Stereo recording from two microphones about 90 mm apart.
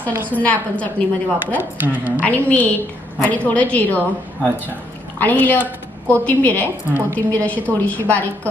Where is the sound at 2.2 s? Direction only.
15° left (ahead or behind).